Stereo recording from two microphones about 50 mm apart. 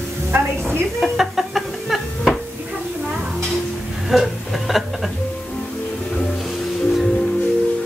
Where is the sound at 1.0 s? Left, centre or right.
Centre.